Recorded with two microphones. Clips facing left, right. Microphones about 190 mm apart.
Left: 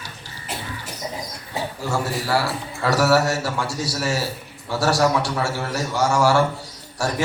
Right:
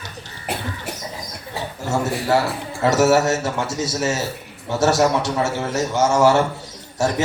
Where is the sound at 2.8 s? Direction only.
20° right (ahead or behind).